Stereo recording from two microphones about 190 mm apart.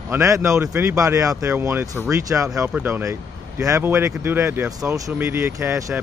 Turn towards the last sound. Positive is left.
turn(degrees=-15)  # may be behind; listen again after turning